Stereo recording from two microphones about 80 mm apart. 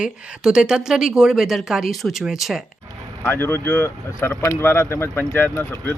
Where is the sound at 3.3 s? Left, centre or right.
Left.